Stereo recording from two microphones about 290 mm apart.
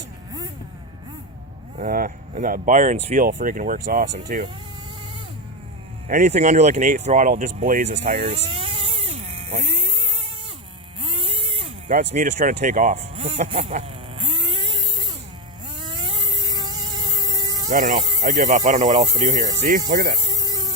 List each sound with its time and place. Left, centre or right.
1.8 s speech: right
6.1 s speech: right
11.0 s a sound: centre
17.7 s speech: right
19.9 s insect: right
20.1 s insect: centre